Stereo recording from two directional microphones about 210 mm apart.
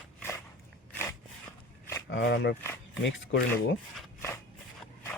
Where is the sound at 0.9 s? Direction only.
10° left (ahead or behind).